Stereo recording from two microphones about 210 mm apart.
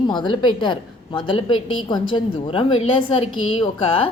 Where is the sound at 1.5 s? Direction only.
75° left (ahead or behind).